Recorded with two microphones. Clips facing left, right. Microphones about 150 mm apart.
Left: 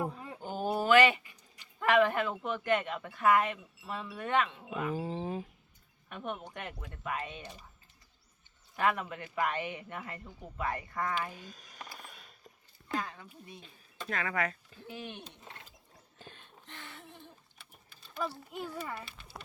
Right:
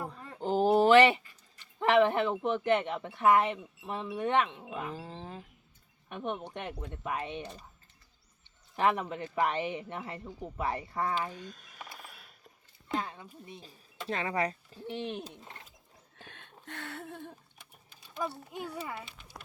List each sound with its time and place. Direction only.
0.0 s a sound: 15° left (ahead or behind)
0.9 s speech: 25° right (ahead or behind)
4.9 s speech: 10° left (ahead or behind)
6.1 s speech: 20° right (ahead or behind)
8.7 s speech: 25° right (ahead or behind)
11.3 s a sound: 5° left (ahead or behind)
12.9 s speech: 20° right (ahead or behind)
13.5 s speech: 35° right (ahead or behind)
16.2 s a sound: 70° right (ahead or behind)
17.6 s sewing machine: 15° right (ahead or behind)
18.5 s a child's voice: 15° right (ahead or behind)